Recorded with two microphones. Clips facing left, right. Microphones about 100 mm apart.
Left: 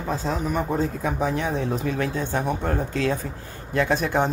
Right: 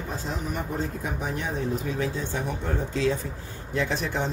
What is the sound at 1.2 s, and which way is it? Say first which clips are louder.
Speech: left 5 dB; 90° left.